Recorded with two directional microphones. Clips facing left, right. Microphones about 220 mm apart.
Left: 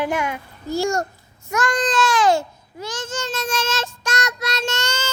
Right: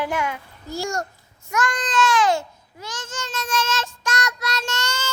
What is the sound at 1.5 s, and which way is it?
Babbling, 30° left (ahead or behind).